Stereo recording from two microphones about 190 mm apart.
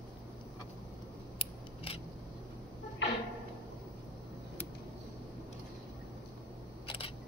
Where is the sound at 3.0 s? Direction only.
70° left (ahead or behind).